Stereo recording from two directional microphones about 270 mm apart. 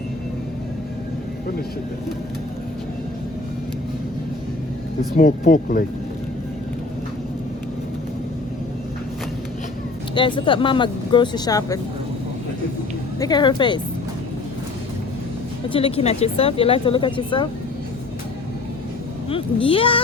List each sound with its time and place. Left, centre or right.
5.1 s speech: left
10.2 s speech: centre
13.1 s speech: centre
15.7 s speech: left
19.3 s speech: centre